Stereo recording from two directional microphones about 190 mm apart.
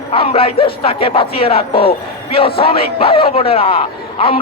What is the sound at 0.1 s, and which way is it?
A man's voice, 30° left (ahead or behind).